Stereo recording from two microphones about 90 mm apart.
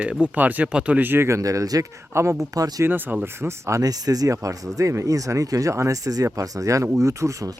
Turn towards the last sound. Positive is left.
turn(degrees=-35)  # may be behind; listen again after turning